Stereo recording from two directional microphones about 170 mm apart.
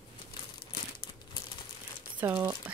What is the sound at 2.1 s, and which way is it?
Speech, 10° right (ahead or behind).